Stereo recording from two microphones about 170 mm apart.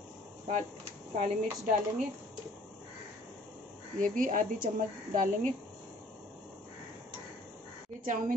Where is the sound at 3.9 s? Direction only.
55° right (ahead or behind).